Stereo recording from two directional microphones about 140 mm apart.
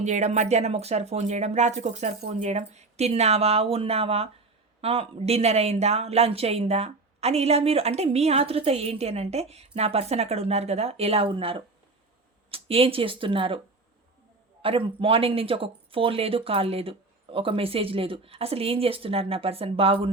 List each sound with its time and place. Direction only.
0.0 s speech: 55° right (ahead or behind); by 13.6 s 40° right (ahead or behind)
14.6 s speech: 40° right (ahead or behind)